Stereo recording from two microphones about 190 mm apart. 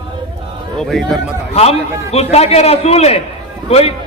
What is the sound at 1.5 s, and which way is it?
A man's voice, 35° left (ahead or behind).